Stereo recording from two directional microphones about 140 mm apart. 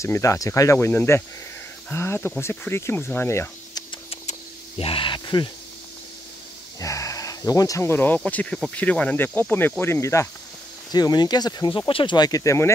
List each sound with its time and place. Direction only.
0.0 s speech: 20° left (ahead or behind)
4.3 s a sound: 45° left (ahead or behind)
6.8 s speech: 20° left (ahead or behind)